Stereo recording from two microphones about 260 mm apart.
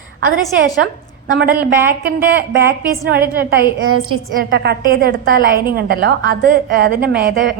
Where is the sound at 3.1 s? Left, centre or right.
Right.